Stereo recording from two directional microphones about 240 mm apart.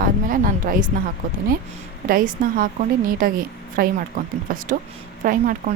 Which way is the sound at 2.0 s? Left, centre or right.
Right.